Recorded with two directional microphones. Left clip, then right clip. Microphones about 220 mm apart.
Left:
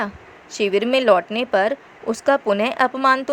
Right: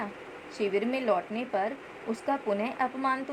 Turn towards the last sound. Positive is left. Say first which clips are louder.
# left 12 dB
turn(degrees=30)  # may be behind; listen again after turning